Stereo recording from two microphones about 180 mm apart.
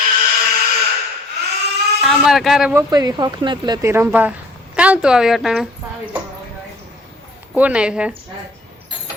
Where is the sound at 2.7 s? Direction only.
20° right (ahead or behind); by 5.7 s centre (ahead or behind).